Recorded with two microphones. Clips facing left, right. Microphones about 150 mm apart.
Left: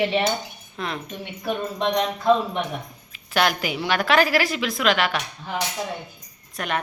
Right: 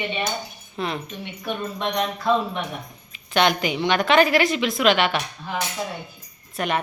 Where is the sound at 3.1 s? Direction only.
5° left (ahead or behind).